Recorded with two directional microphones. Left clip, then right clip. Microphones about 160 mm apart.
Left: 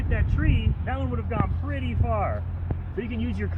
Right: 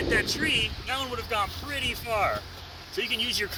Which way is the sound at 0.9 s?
Centre (ahead or behind).